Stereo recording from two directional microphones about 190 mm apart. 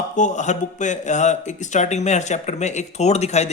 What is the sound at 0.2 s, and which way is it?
Speech, 40° left (ahead or behind).